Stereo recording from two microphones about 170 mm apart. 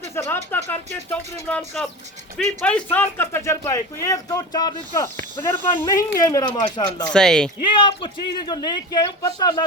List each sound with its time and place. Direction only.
0.1 s a sound: 15° left (ahead or behind)
0.5 s speech: 10° left (ahead or behind); by 7.1 s 25° left (ahead or behind)
7.1 s speech: 5° left (ahead or behind)
7.6 s speech: 30° left (ahead or behind)